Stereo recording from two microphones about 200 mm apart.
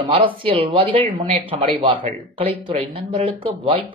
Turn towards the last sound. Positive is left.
turn(degrees=-25)  # may be behind; listen again after turning